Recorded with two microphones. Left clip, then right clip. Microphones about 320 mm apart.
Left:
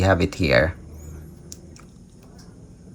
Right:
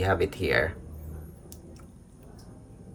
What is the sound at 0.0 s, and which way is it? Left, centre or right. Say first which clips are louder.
Speech: left 6 dB; centre.